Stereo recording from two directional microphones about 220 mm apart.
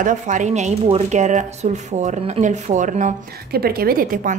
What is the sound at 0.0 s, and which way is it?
Speech, 35° right (ahead or behind).